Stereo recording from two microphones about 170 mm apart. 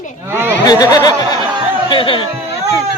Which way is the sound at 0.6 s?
25° left (ahead or behind).